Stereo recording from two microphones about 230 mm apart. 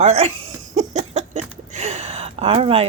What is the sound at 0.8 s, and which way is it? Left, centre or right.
A woman's voice, right.